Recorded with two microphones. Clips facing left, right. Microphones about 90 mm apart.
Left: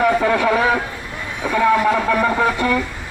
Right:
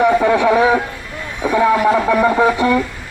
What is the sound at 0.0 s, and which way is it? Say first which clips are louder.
Speech: right 3 dB; 5° right (ahead or behind).